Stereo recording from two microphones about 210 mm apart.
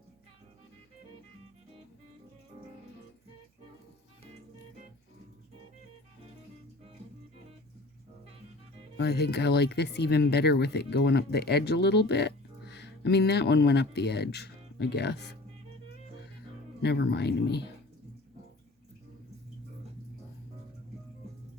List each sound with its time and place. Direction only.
9.0 s speech: 50° left (ahead or behind)
16.8 s speech: 50° left (ahead or behind)